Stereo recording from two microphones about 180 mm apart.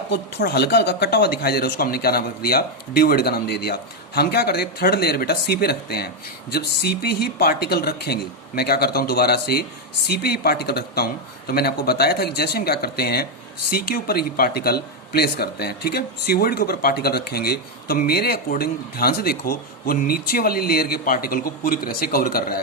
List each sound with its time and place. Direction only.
0.1 s speech: 65° left (ahead or behind)